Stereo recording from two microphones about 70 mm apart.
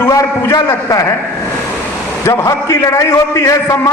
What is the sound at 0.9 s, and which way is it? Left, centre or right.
Speech, left.